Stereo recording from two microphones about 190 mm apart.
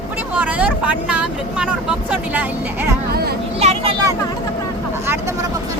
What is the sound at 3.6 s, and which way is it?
Speech, 35° right (ahead or behind).